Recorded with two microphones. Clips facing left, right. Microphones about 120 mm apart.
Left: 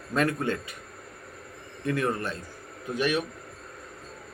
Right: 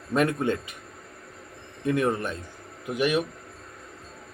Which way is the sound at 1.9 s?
20° right (ahead or behind).